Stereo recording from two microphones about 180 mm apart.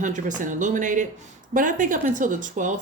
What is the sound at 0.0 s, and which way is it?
Speech, 45° right (ahead or behind).